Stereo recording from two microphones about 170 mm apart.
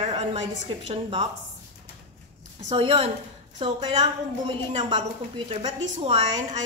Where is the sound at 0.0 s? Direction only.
35° right (ahead or behind).